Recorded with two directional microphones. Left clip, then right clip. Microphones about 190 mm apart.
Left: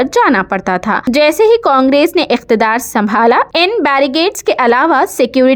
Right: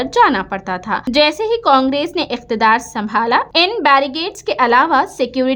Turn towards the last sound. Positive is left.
turn(degrees=35)  # may be behind; listen again after turning